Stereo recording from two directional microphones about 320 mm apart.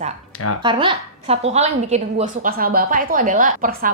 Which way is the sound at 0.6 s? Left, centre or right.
Centre.